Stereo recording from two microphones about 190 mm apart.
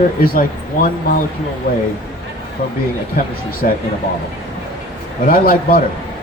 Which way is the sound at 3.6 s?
45° left (ahead or behind).